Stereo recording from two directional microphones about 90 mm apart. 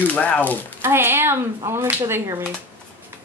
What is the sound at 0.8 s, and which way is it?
Speech, 25° right (ahead or behind).